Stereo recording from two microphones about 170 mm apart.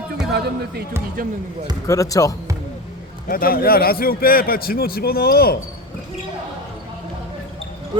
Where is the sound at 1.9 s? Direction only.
20° left (ahead or behind).